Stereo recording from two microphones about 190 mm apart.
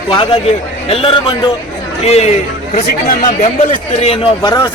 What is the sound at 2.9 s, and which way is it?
A man's voice, 50° left (ahead or behind).